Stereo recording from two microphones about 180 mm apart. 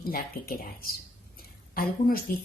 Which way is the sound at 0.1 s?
55° left (ahead or behind).